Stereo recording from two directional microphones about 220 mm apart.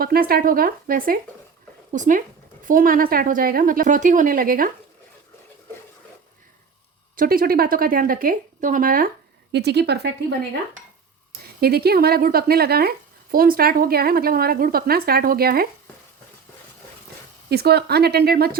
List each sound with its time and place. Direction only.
0.0 s a woman's voice: 40° right (ahead or behind)
7.2 s a woman's voice: 40° right (ahead or behind)
9.5 s speech: 50° right (ahead or behind)
11.6 s speech: 45° right (ahead or behind)
17.5 s speech: 45° right (ahead or behind)